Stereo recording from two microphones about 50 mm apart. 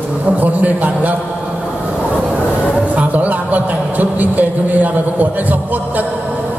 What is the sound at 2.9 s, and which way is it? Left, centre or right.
A man's voice, right.